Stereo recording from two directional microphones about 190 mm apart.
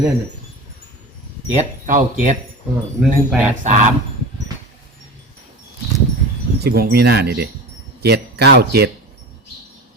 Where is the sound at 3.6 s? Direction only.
40° right (ahead or behind).